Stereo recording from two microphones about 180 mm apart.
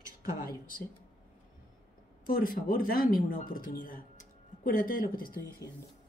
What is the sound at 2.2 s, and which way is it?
Speech, 55° left (ahead or behind).